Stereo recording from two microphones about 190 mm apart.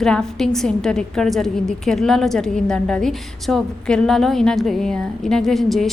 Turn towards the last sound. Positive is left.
turn(degrees=0)  # may be behind; listen again after turning